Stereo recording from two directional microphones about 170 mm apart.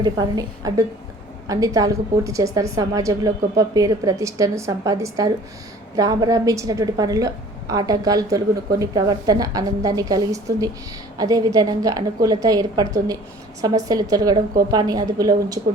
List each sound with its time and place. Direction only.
0.0 s a woman's voice: 25° right (ahead or behind)